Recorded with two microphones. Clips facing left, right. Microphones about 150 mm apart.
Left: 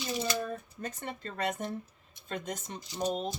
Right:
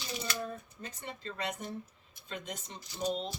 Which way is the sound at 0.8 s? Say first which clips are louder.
Left 5 dB; 50° left (ahead or behind).